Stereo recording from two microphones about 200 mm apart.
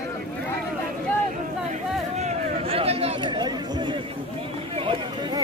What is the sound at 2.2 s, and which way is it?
Chatter, 30° right (ahead or behind).